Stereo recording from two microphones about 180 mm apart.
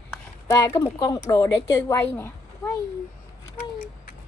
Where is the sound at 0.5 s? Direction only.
15° left (ahead or behind).